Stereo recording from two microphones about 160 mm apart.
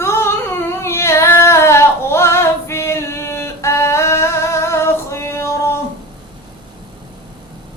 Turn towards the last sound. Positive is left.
turn(degrees=15)  # may be behind; listen again after turning